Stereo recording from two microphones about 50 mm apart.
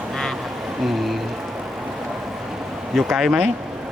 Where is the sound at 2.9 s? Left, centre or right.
Centre.